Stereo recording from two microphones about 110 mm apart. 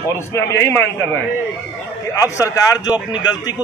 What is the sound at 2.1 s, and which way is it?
A man's voice, 30° left (ahead or behind).